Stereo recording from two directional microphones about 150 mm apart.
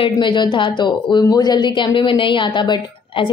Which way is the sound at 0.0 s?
30° left (ahead or behind).